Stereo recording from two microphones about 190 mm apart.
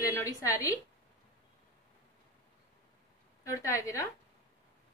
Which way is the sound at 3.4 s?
15° left (ahead or behind).